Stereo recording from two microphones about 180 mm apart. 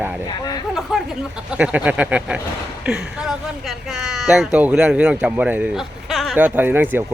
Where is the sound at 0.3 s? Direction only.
20° left (ahead or behind).